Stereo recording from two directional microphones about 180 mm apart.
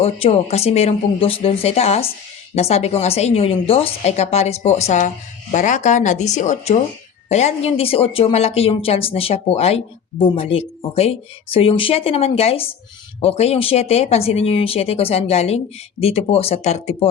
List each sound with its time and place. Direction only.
0.0 s a woman's voice: 35° left (ahead or behind)